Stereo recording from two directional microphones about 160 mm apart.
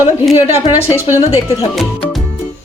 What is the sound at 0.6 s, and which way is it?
Speech, 40° left (ahead or behind).